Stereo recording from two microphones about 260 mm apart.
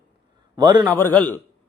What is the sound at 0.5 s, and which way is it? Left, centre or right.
Speech, centre.